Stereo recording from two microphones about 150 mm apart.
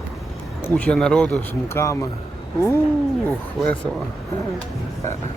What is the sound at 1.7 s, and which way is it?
Speech, 20° left (ahead or behind).